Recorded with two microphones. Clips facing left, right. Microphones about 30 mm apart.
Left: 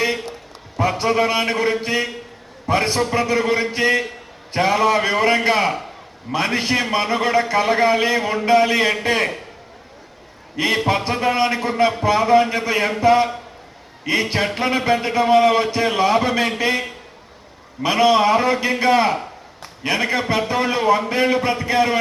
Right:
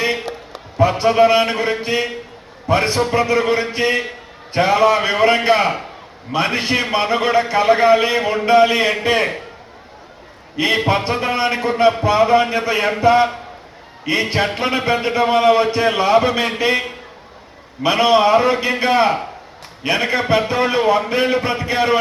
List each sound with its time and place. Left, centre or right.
0.0 s a sound: right
0.8 s a man's voice: right
10.8 s a man's voice: right
14.3 s a man's voice: right
20.1 s a man's voice: right
21.1 s a man's voice: right
21.3 s speech: right